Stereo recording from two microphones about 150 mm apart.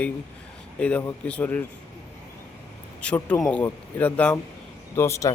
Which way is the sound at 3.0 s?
10° left (ahead or behind).